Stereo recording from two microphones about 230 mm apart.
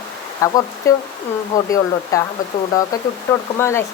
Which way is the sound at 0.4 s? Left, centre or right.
Centre.